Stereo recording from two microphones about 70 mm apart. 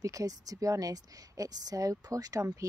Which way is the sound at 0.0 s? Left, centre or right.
Right.